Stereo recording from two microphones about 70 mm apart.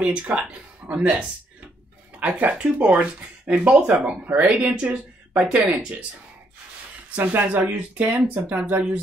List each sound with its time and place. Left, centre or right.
0.3 s speech: right
7.1 s speech: right